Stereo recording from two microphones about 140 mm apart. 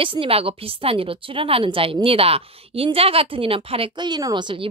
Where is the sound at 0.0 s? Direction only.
40° right (ahead or behind).